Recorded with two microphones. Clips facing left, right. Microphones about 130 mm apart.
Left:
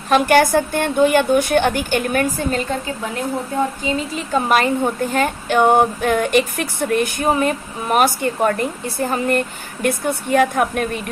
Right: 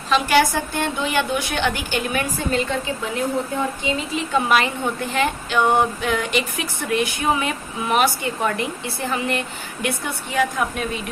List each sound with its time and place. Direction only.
0.1 s speech: 55° left (ahead or behind)
3.8 s a woman's voice: 40° left (ahead or behind)